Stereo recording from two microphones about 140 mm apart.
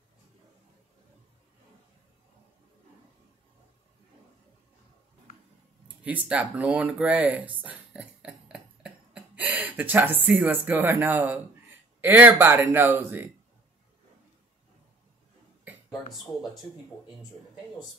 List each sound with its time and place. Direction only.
5.9 s speech: 10° right (ahead or behind)